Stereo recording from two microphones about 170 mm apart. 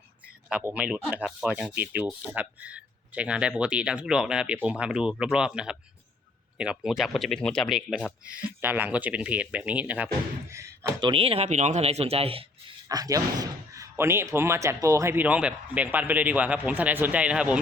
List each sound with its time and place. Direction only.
0.4 s speech: 5° right (ahead or behind)
11.1 s speech: 35° right (ahead or behind); by 17.6 s 5° right (ahead or behind)